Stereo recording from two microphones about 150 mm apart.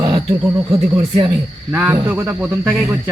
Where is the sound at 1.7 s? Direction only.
15° right (ahead or behind).